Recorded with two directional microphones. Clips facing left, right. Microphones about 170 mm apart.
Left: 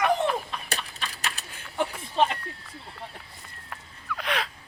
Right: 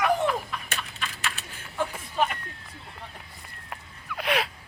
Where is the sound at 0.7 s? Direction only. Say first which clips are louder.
Left 1 dB; 35° left (ahead or behind).